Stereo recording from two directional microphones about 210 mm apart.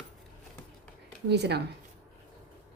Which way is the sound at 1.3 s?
55° right (ahead or behind).